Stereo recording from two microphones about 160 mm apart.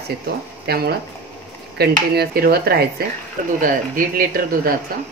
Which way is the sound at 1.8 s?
80° right.